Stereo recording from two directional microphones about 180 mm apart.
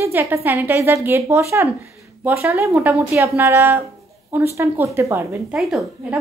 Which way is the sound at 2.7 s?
Centre (ahead or behind).